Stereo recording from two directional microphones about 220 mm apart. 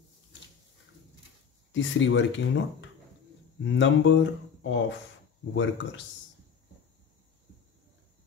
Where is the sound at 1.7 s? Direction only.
60° left (ahead or behind).